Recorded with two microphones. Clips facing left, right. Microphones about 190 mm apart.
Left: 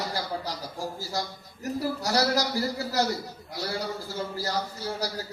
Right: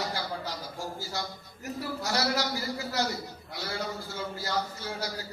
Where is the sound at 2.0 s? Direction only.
40° left (ahead or behind).